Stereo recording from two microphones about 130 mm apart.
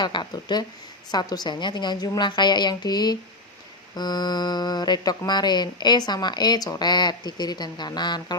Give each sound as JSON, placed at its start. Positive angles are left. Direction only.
{"t": 0.0, "sound": "speech", "side_deg": 35}